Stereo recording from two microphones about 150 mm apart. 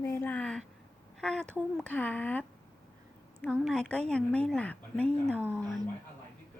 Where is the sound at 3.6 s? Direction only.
5° left (ahead or behind).